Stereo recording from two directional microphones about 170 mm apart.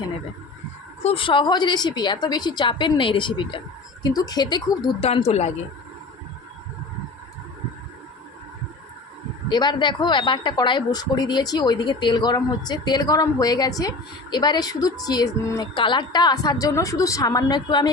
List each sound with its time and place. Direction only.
1.0 s speech: 30° left (ahead or behind)
5.0 s speech: 35° left (ahead or behind)
9.5 s speech: 25° left (ahead or behind)